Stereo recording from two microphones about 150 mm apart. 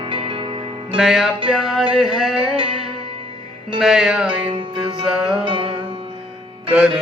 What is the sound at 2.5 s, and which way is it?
Music, 35° right (ahead or behind).